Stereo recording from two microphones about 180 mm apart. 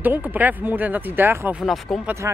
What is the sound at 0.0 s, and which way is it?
Speech, 10° right (ahead or behind).